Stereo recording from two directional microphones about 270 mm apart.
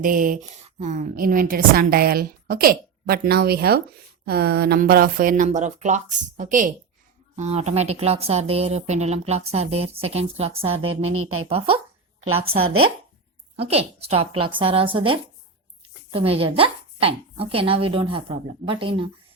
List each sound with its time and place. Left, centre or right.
0.0 s a woman's voice: right
11.1 s speech: right
11.4 s speech: right
13.6 s speech: right